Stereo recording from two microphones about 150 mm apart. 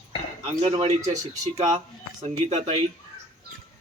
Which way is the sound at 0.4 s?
40° right (ahead or behind).